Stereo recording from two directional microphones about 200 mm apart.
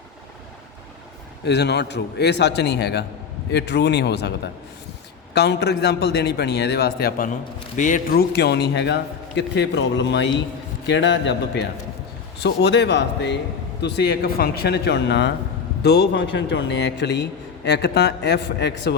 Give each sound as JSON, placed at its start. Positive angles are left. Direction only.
{"t": 1.5, "sound": "a man's voice", "side_deg": 55}
{"t": 5.3, "sound": "a man's voice", "side_deg": 55}